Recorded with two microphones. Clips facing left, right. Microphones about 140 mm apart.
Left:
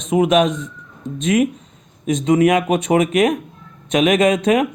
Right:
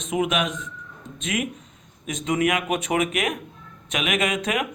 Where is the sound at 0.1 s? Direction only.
35° left (ahead or behind).